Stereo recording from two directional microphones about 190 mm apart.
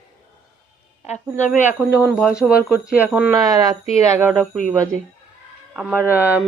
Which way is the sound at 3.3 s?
20° right (ahead or behind).